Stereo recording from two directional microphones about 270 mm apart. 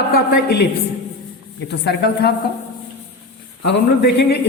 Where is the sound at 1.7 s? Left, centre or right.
Left.